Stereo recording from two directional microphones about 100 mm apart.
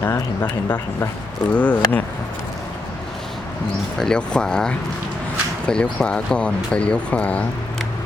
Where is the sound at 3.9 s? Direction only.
5° left (ahead or behind).